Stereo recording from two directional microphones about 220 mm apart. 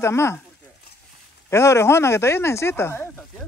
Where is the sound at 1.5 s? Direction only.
10° left (ahead or behind).